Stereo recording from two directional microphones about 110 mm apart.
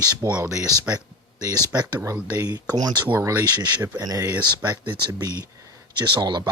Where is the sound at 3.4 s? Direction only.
35° right (ahead or behind).